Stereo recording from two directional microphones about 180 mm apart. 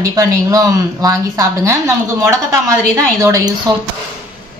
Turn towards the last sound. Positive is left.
turn(degrees=-15)  # may be behind; listen again after turning